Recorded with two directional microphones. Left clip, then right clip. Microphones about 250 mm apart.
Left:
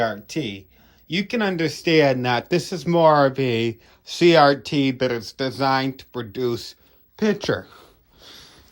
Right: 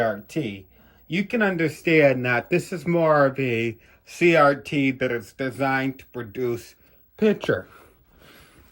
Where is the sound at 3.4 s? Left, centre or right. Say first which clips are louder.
Left 2 dB; left.